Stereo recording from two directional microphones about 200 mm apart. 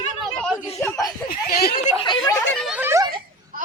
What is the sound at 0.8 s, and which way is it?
Speech, 15° left (ahead or behind).